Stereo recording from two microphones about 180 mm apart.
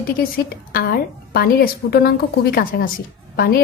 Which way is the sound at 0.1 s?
55° left (ahead or behind).